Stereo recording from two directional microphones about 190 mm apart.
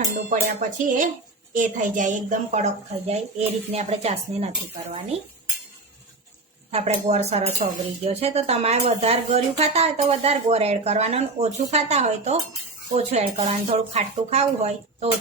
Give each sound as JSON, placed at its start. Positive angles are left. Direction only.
{"t": 0.0, "sound": "speech", "side_deg": -40}
{"t": 6.7, "sound": "speech", "side_deg": -35}